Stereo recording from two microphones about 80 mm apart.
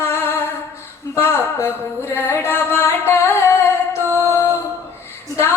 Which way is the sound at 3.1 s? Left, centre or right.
Left.